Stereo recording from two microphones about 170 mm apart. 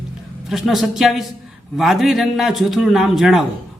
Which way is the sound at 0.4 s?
Centre (ahead or behind).